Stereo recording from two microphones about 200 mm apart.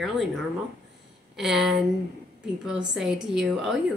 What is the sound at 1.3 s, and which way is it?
Speech, centre (ahead or behind).